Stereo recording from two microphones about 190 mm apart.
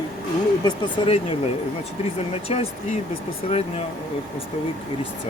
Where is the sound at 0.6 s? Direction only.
30° left (ahead or behind).